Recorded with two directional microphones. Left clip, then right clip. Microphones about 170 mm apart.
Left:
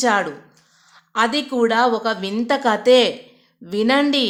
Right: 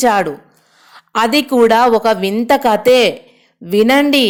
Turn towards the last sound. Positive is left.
turn(degrees=-30)  # may be behind; listen again after turning